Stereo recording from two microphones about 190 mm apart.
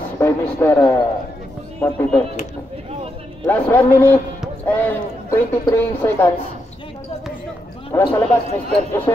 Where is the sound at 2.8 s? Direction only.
30° right (ahead or behind).